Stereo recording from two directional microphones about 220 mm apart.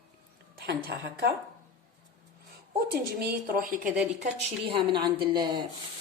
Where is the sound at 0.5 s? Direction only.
50° right (ahead or behind).